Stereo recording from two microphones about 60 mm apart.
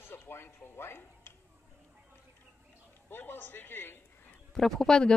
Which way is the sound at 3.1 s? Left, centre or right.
Left.